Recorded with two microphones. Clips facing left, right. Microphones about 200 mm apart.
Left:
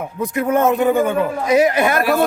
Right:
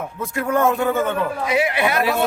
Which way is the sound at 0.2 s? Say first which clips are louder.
Left 3 dB; 20° left (ahead or behind).